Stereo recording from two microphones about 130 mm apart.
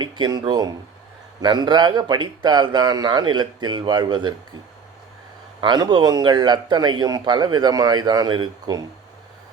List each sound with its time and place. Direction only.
0.0 s a man's voice: 30° right (ahead or behind)
5.5 s a man's voice: 35° right (ahead or behind)